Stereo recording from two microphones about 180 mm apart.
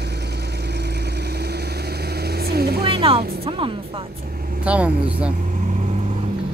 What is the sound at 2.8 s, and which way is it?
Music, 30° right (ahead or behind).